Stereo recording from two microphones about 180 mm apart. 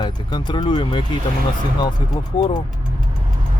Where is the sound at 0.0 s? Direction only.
25° left (ahead or behind).